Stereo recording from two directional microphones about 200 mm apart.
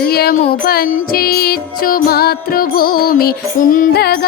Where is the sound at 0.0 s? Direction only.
50° left (ahead or behind).